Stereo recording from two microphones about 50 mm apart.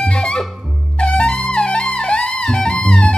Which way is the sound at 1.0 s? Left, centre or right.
Centre.